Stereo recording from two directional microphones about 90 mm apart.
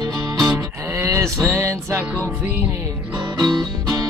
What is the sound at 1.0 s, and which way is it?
Music, 35° right (ahead or behind).